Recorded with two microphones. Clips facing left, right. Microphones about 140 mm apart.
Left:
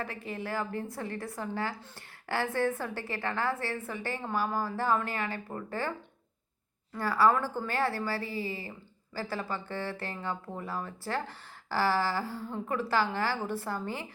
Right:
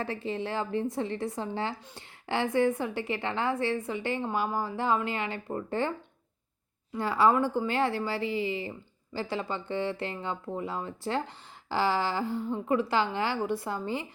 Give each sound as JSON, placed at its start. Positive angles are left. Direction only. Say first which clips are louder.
{"t": 0.0, "sound": "a woman's voice", "louder": "right 5 dB", "side_deg": -30}
{"t": 6.9, "sound": "a woman's voice", "louder": "right 2 dB", "side_deg": -20}